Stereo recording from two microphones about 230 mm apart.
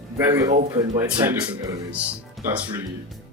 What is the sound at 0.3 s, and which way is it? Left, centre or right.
Speech, centre.